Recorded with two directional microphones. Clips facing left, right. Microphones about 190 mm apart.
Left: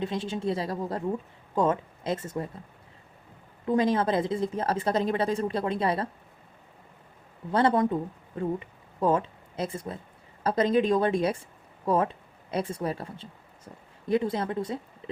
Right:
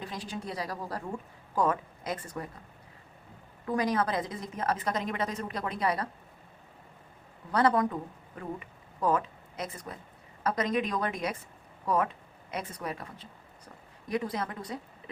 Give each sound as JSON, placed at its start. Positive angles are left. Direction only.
{"t": 0.0, "sound": "a woman's voice", "side_deg": 25}
{"t": 3.7, "sound": "a woman's voice", "side_deg": 25}
{"t": 7.5, "sound": "a woman's voice", "side_deg": 25}